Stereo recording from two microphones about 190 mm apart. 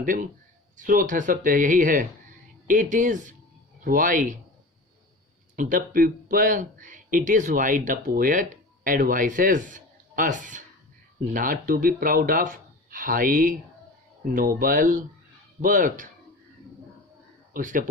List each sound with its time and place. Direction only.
0.0 s speech: 45° right (ahead or behind)
5.5 s speech: 45° right (ahead or behind)
17.5 s a man's voice: 45° right (ahead or behind)